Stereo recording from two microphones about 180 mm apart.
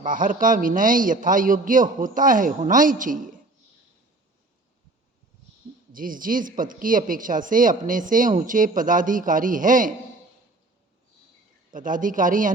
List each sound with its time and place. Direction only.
0.0 s a man's voice: 50° right (ahead or behind)
5.9 s a man's voice: 50° right (ahead or behind)
11.7 s a man's voice: 50° right (ahead or behind)